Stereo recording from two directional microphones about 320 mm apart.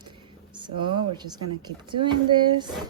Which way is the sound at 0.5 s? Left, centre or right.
Centre.